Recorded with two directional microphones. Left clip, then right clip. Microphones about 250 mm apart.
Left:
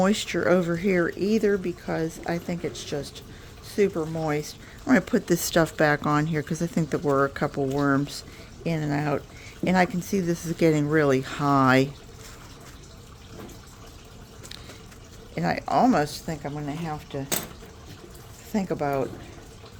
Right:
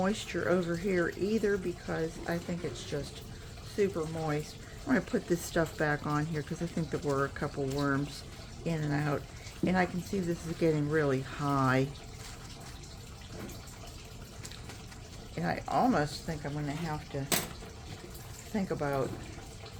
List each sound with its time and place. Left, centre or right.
0.0 s speech: left
15.4 s speech: left
18.5 s speech: left